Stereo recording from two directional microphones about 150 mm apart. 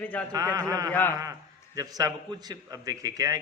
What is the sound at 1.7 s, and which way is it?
A man's voice, 25° right (ahead or behind).